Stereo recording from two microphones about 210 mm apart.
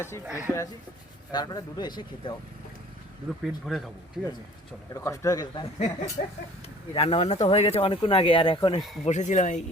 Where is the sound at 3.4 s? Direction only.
Centre (ahead or behind).